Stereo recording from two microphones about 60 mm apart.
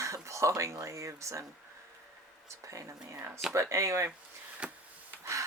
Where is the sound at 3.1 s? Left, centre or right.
Right.